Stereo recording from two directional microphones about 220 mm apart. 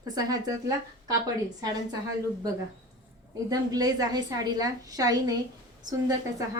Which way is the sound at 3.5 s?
15° right (ahead or behind).